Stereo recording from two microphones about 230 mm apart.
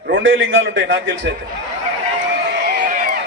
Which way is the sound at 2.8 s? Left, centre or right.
Right.